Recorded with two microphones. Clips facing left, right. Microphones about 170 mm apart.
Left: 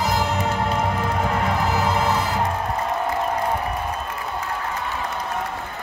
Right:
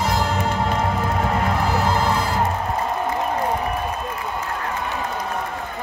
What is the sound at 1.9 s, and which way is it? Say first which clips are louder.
Music: right 1 dB; centre (ahead or behind).